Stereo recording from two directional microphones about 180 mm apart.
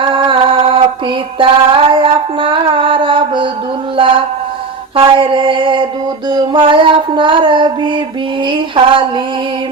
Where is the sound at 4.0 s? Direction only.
30° right (ahead or behind).